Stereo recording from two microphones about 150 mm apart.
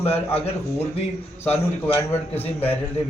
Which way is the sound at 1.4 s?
15° left (ahead or behind).